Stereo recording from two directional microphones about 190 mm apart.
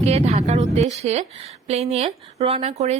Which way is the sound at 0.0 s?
35° right (ahead or behind).